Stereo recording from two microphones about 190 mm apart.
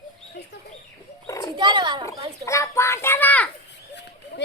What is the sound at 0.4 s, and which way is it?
Chicken, 60° left (ahead or behind).